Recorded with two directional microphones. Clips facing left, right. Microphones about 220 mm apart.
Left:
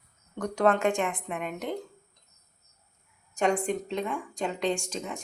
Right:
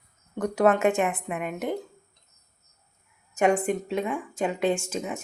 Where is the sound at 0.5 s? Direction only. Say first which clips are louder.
Right 3 dB; 5° right (ahead or behind).